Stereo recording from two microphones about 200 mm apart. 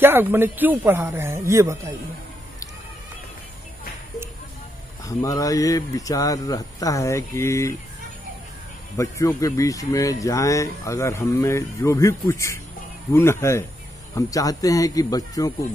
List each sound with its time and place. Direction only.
0.0 s a man's voice: 10° right (ahead or behind)
5.0 s speech: 15° left (ahead or behind)
8.9 s speech: 15° left (ahead or behind)